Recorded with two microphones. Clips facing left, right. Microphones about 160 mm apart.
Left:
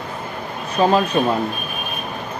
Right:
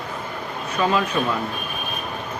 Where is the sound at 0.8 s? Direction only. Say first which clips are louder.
Left 5 dB; 35° left (ahead or behind).